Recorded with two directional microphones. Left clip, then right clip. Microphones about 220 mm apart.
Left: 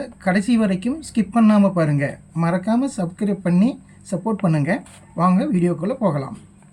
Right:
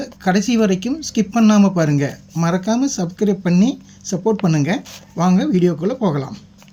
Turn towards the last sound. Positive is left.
turn(degrees=-15)  # may be behind; listen again after turning